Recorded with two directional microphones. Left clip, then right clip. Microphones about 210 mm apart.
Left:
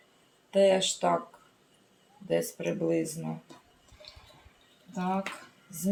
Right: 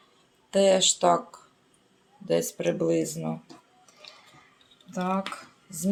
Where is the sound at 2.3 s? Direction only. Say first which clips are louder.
Right 4 dB; 45° right (ahead or behind).